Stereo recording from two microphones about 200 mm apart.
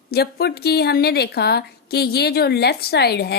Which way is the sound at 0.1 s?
55° left (ahead or behind).